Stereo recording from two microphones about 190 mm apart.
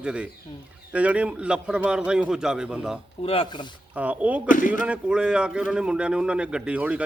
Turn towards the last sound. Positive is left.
turn(degrees=-5)  # may be behind; listen again after turning